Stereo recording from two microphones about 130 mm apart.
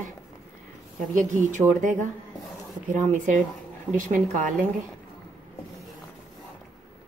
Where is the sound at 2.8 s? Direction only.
75° right (ahead or behind).